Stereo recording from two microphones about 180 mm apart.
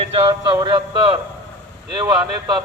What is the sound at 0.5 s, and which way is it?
Speech, 25° right (ahead or behind).